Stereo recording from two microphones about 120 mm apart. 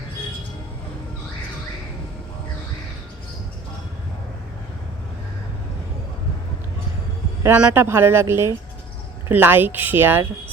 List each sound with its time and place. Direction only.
7.5 s speech: 15° right (ahead or behind)